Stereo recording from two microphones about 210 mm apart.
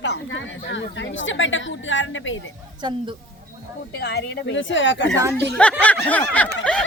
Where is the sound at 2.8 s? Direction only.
25° right (ahead or behind).